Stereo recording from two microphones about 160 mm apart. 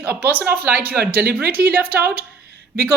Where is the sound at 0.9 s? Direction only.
75° right (ahead or behind).